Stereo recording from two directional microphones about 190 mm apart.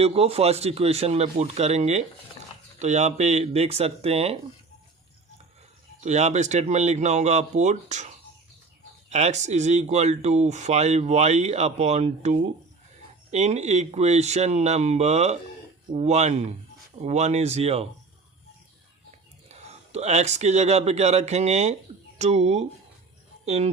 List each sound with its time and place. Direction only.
0.0 s speech: 30° right (ahead or behind)
6.0 s speech: 35° right (ahead or behind)
9.0 s speech: 35° right (ahead or behind)
19.5 s speech: 35° right (ahead or behind)